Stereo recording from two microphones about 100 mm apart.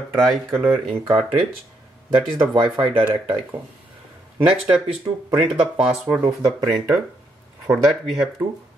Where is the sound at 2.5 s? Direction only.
55° right (ahead or behind).